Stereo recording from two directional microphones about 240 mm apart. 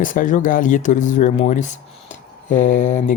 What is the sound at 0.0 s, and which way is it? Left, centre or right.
Speech, left.